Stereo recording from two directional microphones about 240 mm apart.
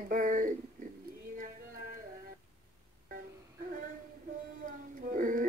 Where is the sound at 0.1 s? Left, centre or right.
Right.